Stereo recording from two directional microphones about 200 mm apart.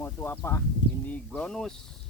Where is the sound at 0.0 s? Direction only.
10° left (ahead or behind).